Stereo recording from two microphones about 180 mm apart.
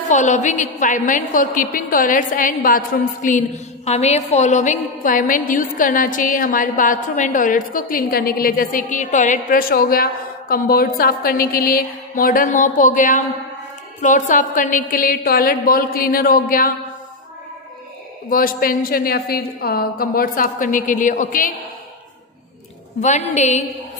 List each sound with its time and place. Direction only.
0.1 s a woman's voice: 40° left (ahead or behind)
18.3 s a woman's voice: 50° left (ahead or behind)
23.0 s a woman's voice: 40° left (ahead or behind)